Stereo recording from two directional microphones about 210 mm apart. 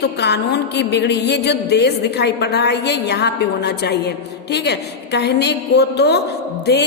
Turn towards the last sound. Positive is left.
turn(degrees=50)  # may be behind; listen again after turning